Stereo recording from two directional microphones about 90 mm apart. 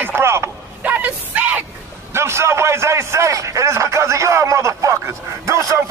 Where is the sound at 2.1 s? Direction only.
30° right (ahead or behind).